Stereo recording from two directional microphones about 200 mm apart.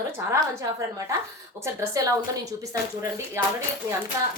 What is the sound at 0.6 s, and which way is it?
A woman's voice, 15° right (ahead or behind).